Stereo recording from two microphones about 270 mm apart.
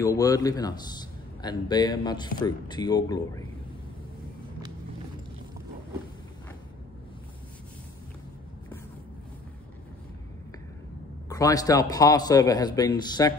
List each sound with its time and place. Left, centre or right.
0.0 s a man's voice: centre
11.2 s a man's voice: centre